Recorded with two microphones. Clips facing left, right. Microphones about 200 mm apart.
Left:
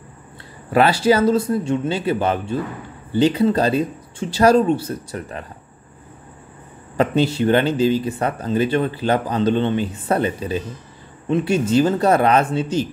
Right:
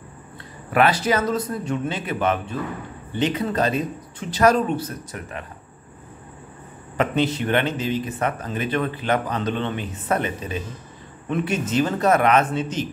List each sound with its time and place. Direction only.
0.7 s speech: 30° left (ahead or behind)
7.0 s speech: 30° left (ahead or behind)